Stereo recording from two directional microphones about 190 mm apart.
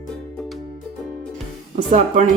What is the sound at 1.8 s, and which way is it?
Speech, 40° right (ahead or behind).